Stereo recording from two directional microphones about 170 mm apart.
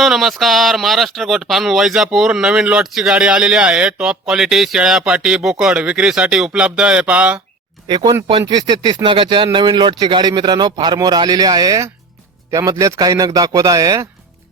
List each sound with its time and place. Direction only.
0.0 s speech: centre (ahead or behind)
7.9 s speech: 25° right (ahead or behind)